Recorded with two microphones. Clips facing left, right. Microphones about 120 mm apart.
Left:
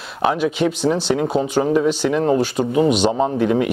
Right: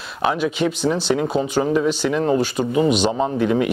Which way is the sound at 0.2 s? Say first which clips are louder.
Left 2 dB; 50° left (ahead or behind).